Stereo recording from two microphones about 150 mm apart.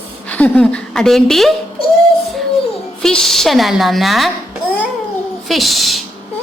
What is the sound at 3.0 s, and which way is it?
A woman's voice, 5° left (ahead or behind).